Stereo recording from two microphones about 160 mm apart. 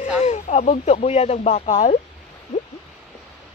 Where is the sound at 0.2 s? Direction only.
45° left (ahead or behind).